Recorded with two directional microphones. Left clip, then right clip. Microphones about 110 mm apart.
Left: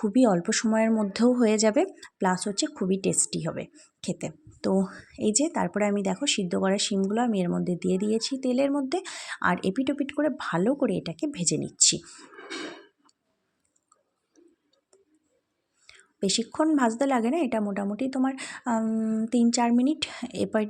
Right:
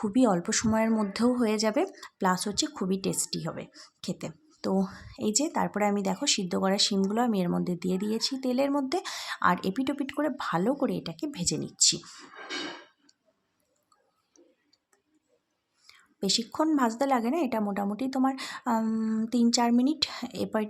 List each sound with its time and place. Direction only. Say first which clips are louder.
0.0 s speech: left 3 dB; 25° left (ahead or behind)
2.0 s speech: left 1 dB; 25° left (ahead or behind)
3.7 s a sound: right 5 dB; 15° left (ahead or behind)
4.0 s speech: left 4 dB; 30° left (ahead or behind)
15.9 s speech: left 1 dB; 30° left (ahead or behind)
18.8 s a sound: left 2 dB; 10° left (ahead or behind)
19.3 s speech: left 1 dB; 25° left (ahead or behind)